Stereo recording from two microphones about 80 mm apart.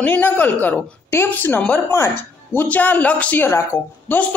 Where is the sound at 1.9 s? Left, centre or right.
Left.